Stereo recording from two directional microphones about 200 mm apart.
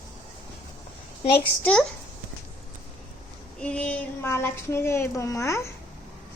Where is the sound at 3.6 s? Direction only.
5° left (ahead or behind).